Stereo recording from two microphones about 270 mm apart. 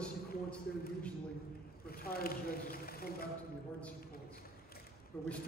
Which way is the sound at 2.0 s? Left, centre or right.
Left.